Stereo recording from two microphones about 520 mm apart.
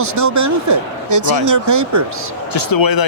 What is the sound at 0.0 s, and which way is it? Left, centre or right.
A man's voice, right.